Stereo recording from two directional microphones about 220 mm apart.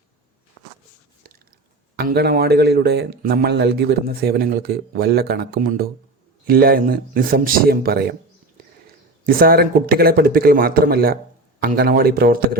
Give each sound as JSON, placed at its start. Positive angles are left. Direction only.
{"t": 2.0, "sound": "speech", "side_deg": -45}
{"t": 9.2, "sound": "speech", "side_deg": -40}